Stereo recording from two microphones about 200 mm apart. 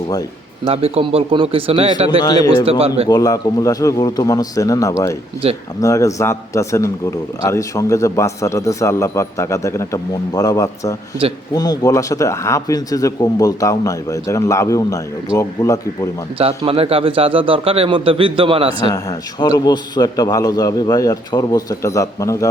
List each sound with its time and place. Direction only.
0.7 s a man's voice: 30° right (ahead or behind)
2.0 s speech: 20° left (ahead or behind)
2.6 s a man's voice: 30° right (ahead or behind)
3.1 s a man's voice: 15° left (ahead or behind)
16.4 s a man's voice: 30° right (ahead or behind)
19.4 s a man's voice: 20° left (ahead or behind)